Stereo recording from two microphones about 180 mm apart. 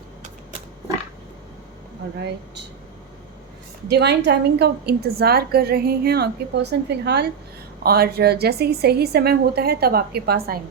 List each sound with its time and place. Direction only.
3.8 s a woman's voice: 65° right (ahead or behind)